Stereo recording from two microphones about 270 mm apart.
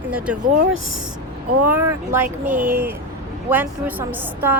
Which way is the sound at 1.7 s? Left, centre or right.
Centre.